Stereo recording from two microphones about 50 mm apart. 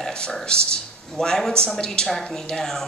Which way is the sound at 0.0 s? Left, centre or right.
Centre.